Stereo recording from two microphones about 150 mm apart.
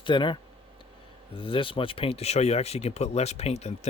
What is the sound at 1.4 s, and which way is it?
Speech, 35° left (ahead or behind).